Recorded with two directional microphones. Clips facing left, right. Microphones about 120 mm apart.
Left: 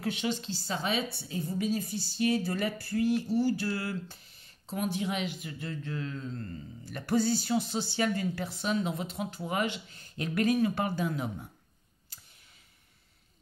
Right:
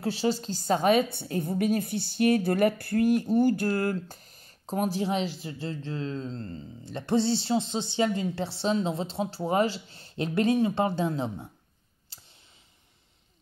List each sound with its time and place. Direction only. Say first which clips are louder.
0.0 s a woman's voice: right 5 dB; 35° right (ahead or behind)
12.1 s clicking: right 2 dB; 30° right (ahead or behind)